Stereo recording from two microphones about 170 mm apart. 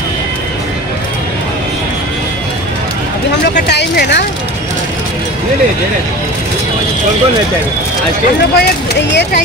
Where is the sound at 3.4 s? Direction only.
75° left (ahead or behind).